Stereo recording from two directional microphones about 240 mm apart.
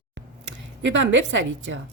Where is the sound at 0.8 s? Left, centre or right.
Right.